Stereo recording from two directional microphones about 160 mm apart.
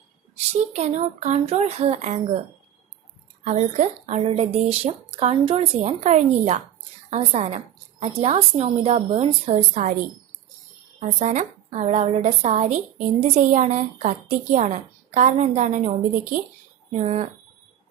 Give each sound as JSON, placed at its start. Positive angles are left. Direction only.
{"t": 0.8, "sound": "a woman's voice", "side_deg": -45}
{"t": 3.4, "sound": "a woman's voice", "side_deg": -45}
{"t": 11.0, "sound": "a woman's voice", "side_deg": -50}
{"t": 16.9, "sound": "a woman's voice", "side_deg": -45}